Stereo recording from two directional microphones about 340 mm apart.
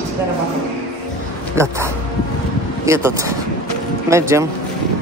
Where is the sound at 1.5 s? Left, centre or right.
Centre.